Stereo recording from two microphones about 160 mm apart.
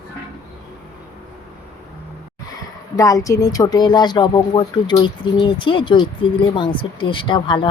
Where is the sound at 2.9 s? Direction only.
20° left (ahead or behind).